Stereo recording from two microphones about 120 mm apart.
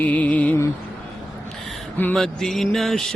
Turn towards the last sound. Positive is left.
turn(degrees=5)  # may be behind; listen again after turning